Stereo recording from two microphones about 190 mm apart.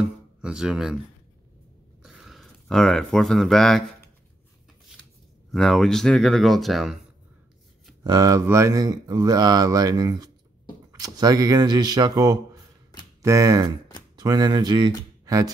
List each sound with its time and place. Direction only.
0.4 s speech: 5° right (ahead or behind)
2.0 s speech: centre (ahead or behind)
5.5 s speech: centre (ahead or behind)
8.0 s speech: 20° right (ahead or behind)